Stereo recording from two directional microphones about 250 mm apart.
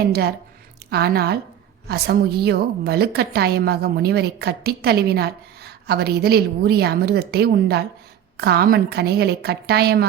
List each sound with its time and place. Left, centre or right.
0.0 s a woman's voice: right